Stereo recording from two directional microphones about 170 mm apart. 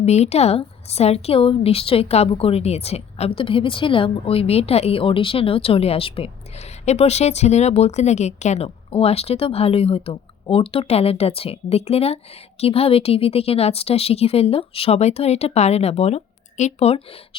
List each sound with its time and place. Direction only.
0.0 s speech: 40° left (ahead or behind)